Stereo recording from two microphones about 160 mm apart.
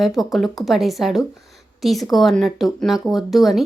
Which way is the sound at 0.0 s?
Centre (ahead or behind).